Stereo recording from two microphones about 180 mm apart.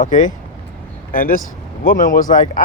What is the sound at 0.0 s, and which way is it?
Speech, 45° left (ahead or behind).